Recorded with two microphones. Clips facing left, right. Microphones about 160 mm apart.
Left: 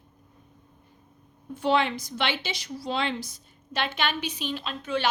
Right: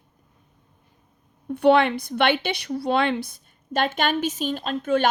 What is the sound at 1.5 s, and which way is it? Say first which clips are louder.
A woman's voice: right 7 dB; 65° right (ahead or behind).